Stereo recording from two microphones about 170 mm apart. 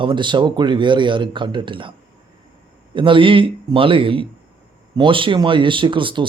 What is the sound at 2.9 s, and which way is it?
Speech, 30° right (ahead or behind).